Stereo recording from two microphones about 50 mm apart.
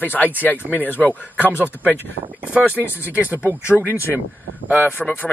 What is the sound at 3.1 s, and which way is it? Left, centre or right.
Speech, right.